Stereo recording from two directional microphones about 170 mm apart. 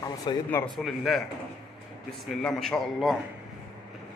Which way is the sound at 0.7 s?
Centre (ahead or behind).